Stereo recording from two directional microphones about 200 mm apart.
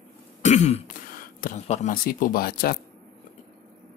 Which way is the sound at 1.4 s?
35° left (ahead or behind).